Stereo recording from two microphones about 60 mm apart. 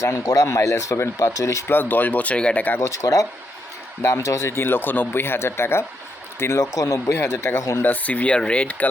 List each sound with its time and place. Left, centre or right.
0.2 s speech: left
0.4 s speech: left
1.7 s speech: left
2.7 s speech: left
4.5 s speech: left
6.6 s speech: left
7.1 s speech: left
7.8 s speech: left